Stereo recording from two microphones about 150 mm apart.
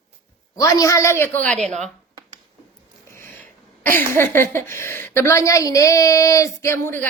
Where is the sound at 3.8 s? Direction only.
15° left (ahead or behind).